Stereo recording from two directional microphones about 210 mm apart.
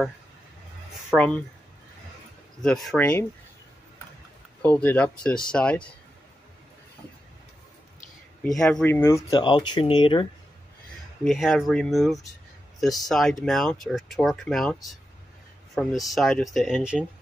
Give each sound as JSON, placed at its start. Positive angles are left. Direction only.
{"t": 1.1, "sound": "speech", "side_deg": 5}
{"t": 2.6, "sound": "speech", "side_deg": 0}
{"t": 4.6, "sound": "speech", "side_deg": 5}
{"t": 8.5, "sound": "speech", "side_deg": 0}
{"t": 11.2, "sound": "speech", "side_deg": 0}